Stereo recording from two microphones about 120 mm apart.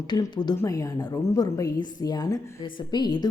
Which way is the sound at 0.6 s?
30° left (ahead or behind).